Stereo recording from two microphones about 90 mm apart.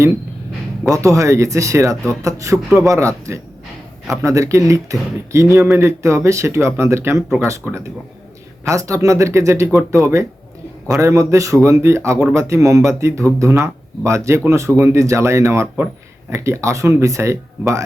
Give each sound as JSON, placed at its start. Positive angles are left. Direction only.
{"t": 0.9, "sound": "speech", "side_deg": -35}
{"t": 15.6, "sound": "speech", "side_deg": -20}
{"t": 16.3, "sound": "speech", "side_deg": -30}